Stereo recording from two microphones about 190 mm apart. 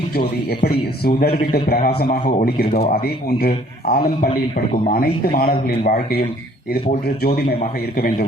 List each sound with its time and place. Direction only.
0.2 s speech: 50° left (ahead or behind)
7.9 s speech: 50° left (ahead or behind)